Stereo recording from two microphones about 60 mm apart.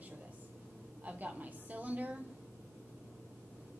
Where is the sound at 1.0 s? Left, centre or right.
Right.